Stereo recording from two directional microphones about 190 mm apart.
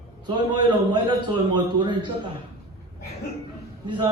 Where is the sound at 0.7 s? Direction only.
25° right (ahead or behind).